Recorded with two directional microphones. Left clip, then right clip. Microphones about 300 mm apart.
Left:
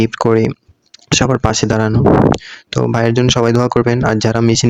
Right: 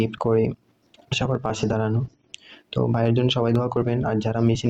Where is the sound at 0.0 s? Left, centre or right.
Left.